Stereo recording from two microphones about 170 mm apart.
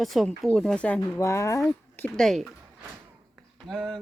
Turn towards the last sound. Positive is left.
turn(degrees=0)  # may be behind; listen again after turning